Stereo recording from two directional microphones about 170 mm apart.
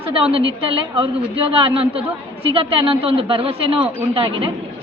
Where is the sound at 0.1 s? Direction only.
35° right (ahead or behind).